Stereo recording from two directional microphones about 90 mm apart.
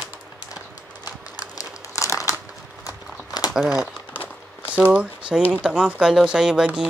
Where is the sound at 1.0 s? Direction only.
45° left (ahead or behind).